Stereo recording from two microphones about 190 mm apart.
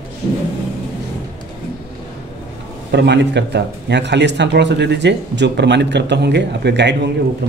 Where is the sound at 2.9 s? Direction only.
65° right (ahead or behind).